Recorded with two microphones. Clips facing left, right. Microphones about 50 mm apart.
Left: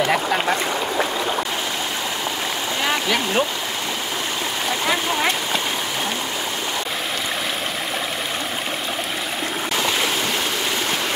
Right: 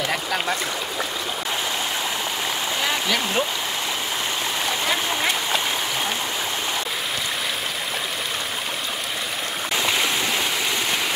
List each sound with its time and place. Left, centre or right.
0.1 s speech: centre
2.8 s stream: centre